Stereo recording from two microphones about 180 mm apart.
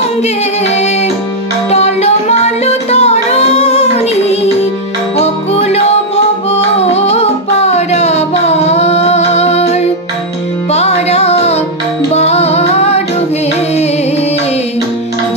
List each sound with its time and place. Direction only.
1.7 s music: 35° left (ahead or behind)
6.9 s music: 35° left (ahead or behind)